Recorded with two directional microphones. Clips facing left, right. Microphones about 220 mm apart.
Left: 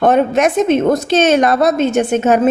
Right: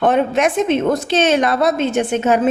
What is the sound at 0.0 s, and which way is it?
A woman's voice, 40° left (ahead or behind).